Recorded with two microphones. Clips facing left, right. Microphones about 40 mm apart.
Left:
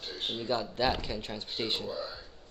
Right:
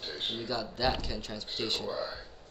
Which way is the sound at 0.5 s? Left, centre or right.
Left.